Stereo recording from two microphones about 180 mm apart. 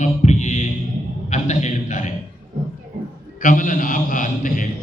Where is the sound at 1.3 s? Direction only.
40° left (ahead or behind).